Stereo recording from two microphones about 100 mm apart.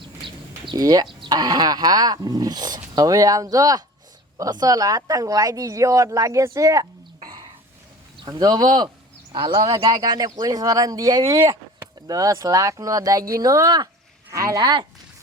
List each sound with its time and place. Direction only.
0.3 s bird: 55° right (ahead or behind)
0.8 s speech: 40° right (ahead or behind)